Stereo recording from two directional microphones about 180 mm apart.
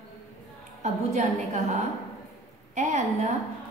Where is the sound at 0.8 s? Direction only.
40° right (ahead or behind).